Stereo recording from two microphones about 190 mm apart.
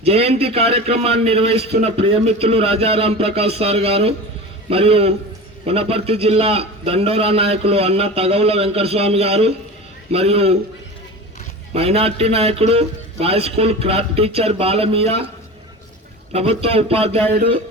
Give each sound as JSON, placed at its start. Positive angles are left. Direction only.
{"t": 0.0, "sound": "a man's voice", "side_deg": -30}
{"t": 11.7, "sound": "a man's voice", "side_deg": -30}
{"t": 16.3, "sound": "a man's voice", "side_deg": -30}